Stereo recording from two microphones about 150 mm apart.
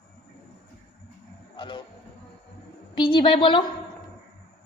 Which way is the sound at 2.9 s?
30° left (ahead or behind).